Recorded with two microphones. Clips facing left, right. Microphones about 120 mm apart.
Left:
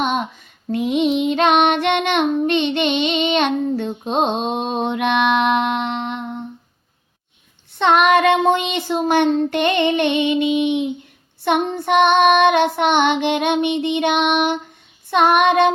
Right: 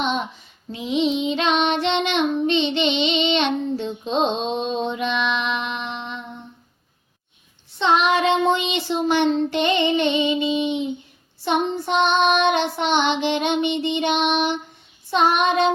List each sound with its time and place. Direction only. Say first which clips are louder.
0.7 s child singing: left 4 dB; 55° left (ahead or behind)
7.8 s child singing: left 4 dB; 55° left (ahead or behind)